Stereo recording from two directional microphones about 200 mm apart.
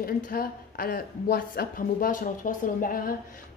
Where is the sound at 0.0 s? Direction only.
45° left (ahead or behind).